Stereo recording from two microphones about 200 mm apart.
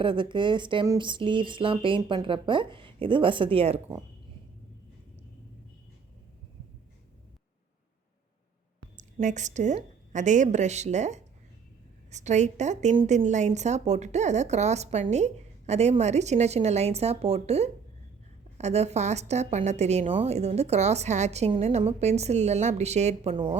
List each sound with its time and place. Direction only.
0.0 s speech: 25° right (ahead or behind)
9.0 s a woman's voice: 35° right (ahead or behind)